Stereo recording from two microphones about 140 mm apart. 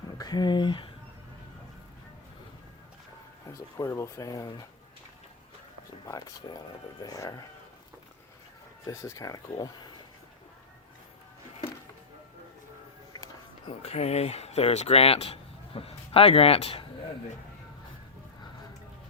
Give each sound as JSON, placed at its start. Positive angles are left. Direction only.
{"t": 0.2, "sound": "speech", "side_deg": 30}
{"t": 3.8, "sound": "speech", "side_deg": 20}
{"t": 6.1, "sound": "speech", "side_deg": 25}
{"t": 8.9, "sound": "speech", "side_deg": 20}
{"t": 13.7, "sound": "speech", "side_deg": 50}